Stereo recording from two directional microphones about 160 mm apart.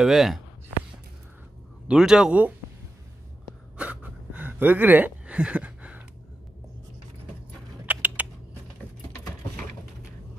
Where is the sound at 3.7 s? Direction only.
10° right (ahead or behind).